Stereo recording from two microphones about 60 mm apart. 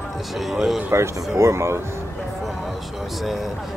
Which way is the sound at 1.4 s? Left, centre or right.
Right.